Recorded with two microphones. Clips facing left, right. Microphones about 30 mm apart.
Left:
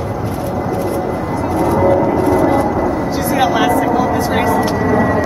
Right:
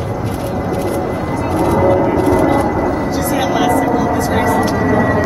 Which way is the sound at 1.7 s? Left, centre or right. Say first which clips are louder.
Even; centre.